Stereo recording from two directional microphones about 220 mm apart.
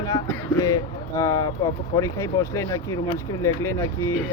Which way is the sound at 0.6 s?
15° left (ahead or behind).